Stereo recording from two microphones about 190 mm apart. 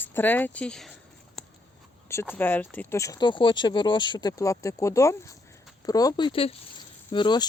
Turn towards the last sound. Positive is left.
turn(degrees=25)  # may be behind; listen again after turning